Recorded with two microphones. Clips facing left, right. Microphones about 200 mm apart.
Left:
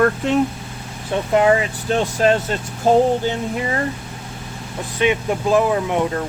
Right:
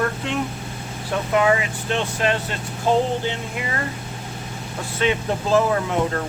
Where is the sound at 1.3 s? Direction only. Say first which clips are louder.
Left 4 dB; 35° left (ahead or behind).